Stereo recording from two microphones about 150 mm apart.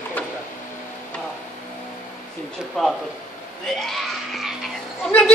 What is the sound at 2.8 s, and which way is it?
A man's voice, 5° left (ahead or behind).